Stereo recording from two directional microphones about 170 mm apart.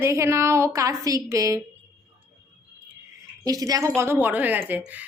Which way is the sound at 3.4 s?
20° right (ahead or behind).